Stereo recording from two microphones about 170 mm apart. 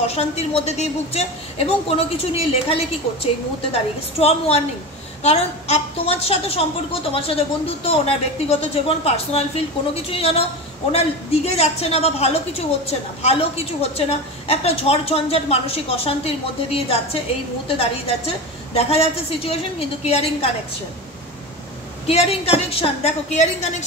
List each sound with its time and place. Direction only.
0.0 s a woman's voice: 35° left (ahead or behind)
22.0 s a woman's voice: 35° left (ahead or behind)